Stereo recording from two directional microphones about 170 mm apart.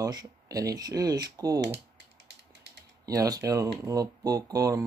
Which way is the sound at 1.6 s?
90° right.